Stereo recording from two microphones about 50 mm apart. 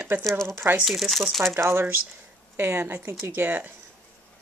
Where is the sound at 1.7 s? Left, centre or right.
Right.